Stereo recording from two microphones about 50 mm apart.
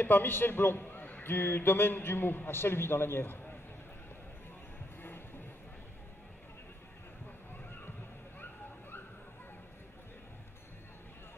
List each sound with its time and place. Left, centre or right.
0.0 s a man's voice: left